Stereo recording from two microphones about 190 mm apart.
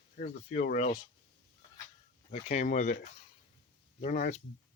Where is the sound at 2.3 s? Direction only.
40° left (ahead or behind).